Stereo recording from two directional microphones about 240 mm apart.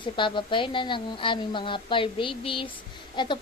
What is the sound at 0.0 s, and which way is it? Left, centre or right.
A woman's voice, centre.